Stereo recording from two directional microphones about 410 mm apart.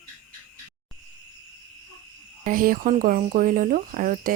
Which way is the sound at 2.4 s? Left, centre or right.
Centre.